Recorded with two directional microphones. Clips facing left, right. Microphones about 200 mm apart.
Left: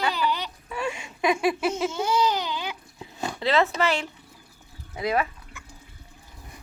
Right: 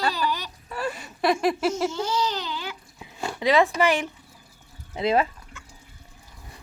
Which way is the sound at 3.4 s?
15° right (ahead or behind).